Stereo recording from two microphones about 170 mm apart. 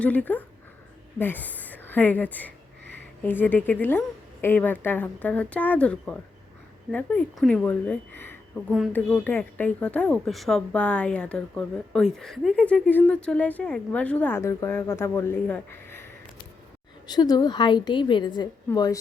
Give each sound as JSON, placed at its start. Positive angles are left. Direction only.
{"t": 0.0, "sound": "speech", "side_deg": 10}
{"t": 17.1, "sound": "a woman's voice", "side_deg": 25}